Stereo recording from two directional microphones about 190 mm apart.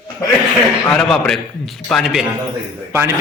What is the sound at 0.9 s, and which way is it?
A man's voice, 5° left (ahead or behind).